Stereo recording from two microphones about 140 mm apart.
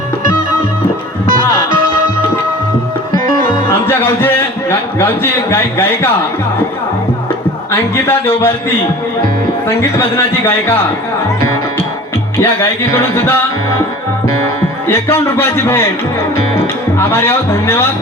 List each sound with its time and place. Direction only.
1.3 s music: 75° right (ahead or behind)
3.1 s music: 75° right (ahead or behind)
3.7 s a sound: 15° left (ahead or behind)
4.9 s a man's voice: 15° left (ahead or behind)
7.7 s a man's voice: 15° left (ahead or behind)
9.6 s a man's voice: 15° left (ahead or behind)
12.4 s a man's voice: 15° left (ahead or behind)
14.8 s a man's voice: 15° left (ahead or behind)
17.0 s a man's voice: 15° left (ahead or behind)